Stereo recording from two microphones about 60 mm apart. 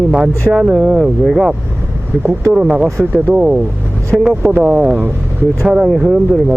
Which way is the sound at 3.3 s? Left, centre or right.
Centre.